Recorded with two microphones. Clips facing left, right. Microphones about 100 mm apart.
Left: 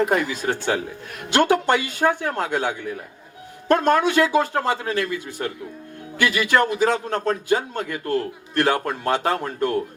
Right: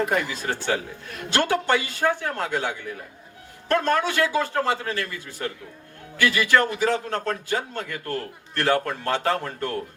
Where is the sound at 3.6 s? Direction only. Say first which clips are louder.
Left 4 dB; 20° left (ahead or behind).